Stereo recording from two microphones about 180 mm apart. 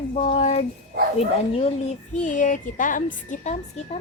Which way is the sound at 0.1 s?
35° left (ahead or behind).